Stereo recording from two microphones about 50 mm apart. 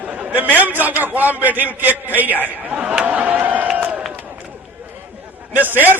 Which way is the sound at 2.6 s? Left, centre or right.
Right.